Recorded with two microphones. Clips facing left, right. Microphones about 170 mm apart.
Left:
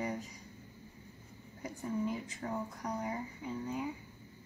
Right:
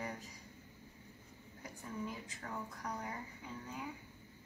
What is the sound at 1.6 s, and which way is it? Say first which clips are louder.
Speech: left 8 dB; 20° left (ahead or behind).